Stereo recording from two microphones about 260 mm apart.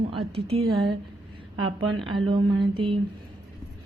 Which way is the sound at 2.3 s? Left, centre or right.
Centre.